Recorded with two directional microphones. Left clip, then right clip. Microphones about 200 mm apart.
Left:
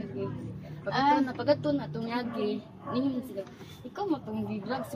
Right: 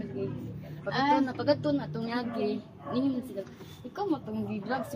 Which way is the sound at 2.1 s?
50° right (ahead or behind).